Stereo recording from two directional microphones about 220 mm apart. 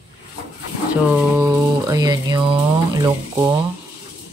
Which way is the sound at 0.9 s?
10° right (ahead or behind).